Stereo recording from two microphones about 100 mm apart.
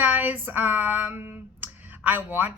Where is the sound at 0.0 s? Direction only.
15° right (ahead or behind).